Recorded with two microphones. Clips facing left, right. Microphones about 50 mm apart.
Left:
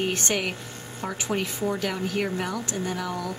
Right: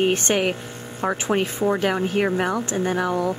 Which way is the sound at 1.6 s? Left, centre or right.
Right.